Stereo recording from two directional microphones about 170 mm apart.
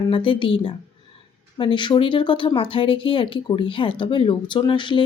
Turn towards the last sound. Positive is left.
turn(degrees=30)  # may be behind; listen again after turning